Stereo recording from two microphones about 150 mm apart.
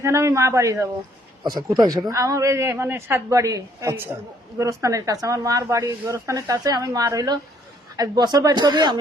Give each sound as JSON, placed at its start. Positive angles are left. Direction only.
{"t": 0.0, "sound": "speech", "side_deg": -20}